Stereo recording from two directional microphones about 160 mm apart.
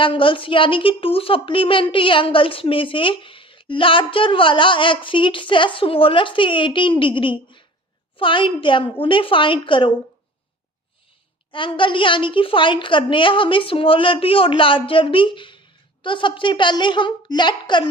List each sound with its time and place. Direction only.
0.0 s a woman's voice: 30° left (ahead or behind)
11.5 s a woman's voice: 30° left (ahead or behind)